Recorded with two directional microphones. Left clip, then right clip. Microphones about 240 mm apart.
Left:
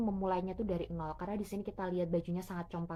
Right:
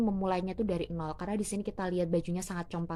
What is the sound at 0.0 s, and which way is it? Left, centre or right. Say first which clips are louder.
A woman's voice: right 3 dB; right.